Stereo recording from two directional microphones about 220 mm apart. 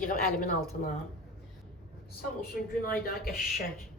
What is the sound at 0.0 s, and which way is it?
Speech, 40° left (ahead or behind).